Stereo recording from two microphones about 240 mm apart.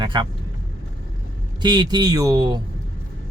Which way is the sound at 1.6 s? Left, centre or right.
Centre.